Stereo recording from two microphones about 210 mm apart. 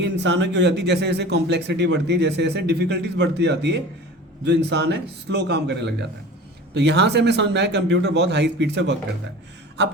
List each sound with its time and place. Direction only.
0.0 s a man's voice: 60° right (ahead or behind)